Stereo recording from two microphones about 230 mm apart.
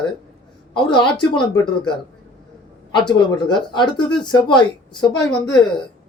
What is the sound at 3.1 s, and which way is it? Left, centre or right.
A woman's voice, centre.